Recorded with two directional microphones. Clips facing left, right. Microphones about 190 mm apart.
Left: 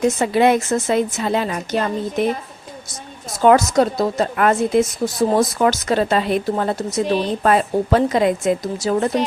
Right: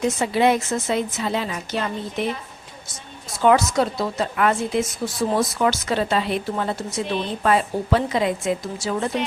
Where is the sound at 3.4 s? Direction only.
45° left (ahead or behind).